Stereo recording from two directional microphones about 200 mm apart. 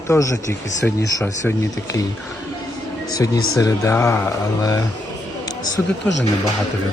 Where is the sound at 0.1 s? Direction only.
15° left (ahead or behind).